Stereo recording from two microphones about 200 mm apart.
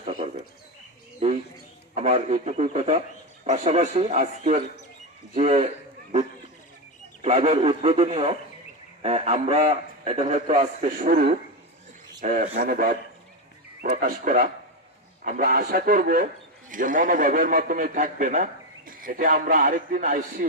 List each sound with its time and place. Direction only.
0.0 s bird: 35° right (ahead or behind)
2.0 s a man's voice: 35° right (ahead or behind)